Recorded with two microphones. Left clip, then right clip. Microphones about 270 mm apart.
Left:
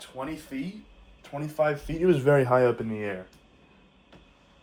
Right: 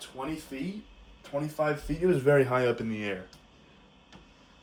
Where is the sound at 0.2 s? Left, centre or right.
Left.